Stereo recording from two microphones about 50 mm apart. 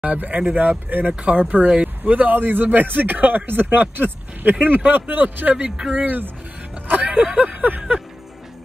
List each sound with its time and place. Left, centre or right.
0.0 s speech: right
5.8 s speech: centre
6.0 s speech: right
7.5 s speech: right